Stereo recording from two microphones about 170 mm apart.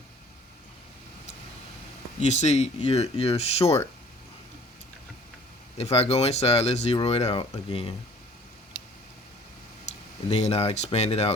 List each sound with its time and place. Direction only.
2.2 s speech: 40° left (ahead or behind)
5.7 s speech: 35° left (ahead or behind)
9.8 s speech: 40° left (ahead or behind)